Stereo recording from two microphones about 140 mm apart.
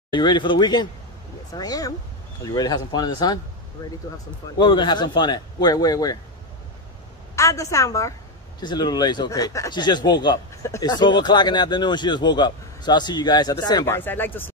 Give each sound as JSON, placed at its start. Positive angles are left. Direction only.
{"t": 0.1, "sound": "speech", "side_deg": 35}
{"t": 4.6, "sound": "speech", "side_deg": 30}
{"t": 7.3, "sound": "speech", "side_deg": 20}
{"t": 13.8, "sound": "speech", "side_deg": 15}